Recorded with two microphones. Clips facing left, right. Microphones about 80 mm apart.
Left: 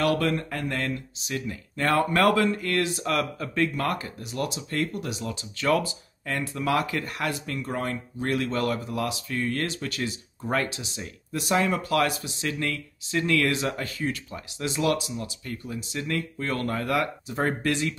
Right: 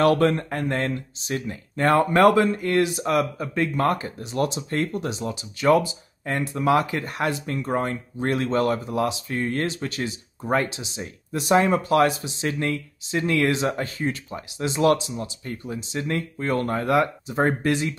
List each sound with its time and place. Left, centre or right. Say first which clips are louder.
0.0 s speech: right 5 dB; right